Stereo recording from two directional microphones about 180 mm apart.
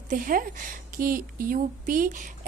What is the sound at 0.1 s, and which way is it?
A woman's voice, 50° right (ahead or behind).